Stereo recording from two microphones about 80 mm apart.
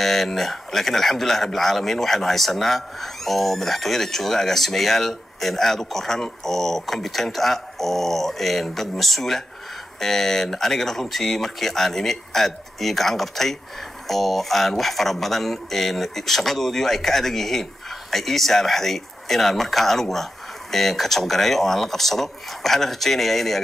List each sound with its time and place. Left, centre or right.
0.0 s speech: centre